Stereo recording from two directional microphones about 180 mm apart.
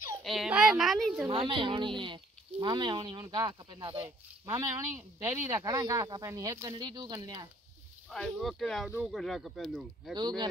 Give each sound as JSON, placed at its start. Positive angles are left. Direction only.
{"t": 0.2, "sound": "speech", "side_deg": 0}
{"t": 1.2, "sound": "speech", "side_deg": -30}
{"t": 8.1, "sound": "speech", "side_deg": 0}
{"t": 10.1, "sound": "speech", "side_deg": -25}